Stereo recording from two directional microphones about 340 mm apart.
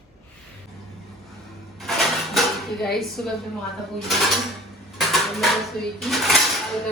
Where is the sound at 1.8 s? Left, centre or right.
Centre.